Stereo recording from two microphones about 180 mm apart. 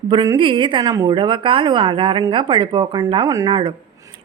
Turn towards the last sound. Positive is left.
turn(degrees=-25)  # may be behind; listen again after turning